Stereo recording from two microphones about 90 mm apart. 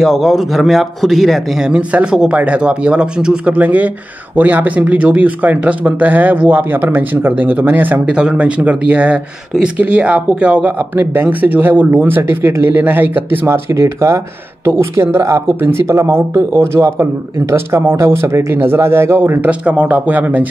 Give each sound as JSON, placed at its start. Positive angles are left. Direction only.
{"t": 0.0, "sound": "a man's voice", "side_deg": 0}